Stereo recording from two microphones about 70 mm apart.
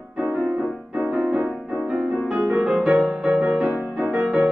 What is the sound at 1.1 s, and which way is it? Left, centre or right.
Music, centre.